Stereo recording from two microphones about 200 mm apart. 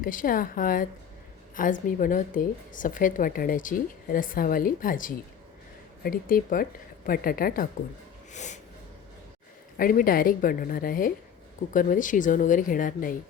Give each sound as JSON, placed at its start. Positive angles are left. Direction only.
{"t": 0.0, "sound": "a woman's voice", "side_deg": 45}
{"t": 8.3, "sound": "wheeze", "side_deg": 35}
{"t": 9.7, "sound": "a woman's voice", "side_deg": 45}